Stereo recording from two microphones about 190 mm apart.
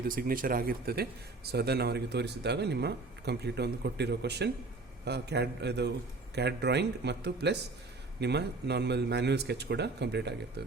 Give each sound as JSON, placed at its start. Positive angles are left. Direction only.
{"t": 0.2, "sound": "speech", "side_deg": -50}